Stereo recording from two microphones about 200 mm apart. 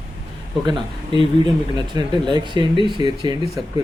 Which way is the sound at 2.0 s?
25° right (ahead or behind).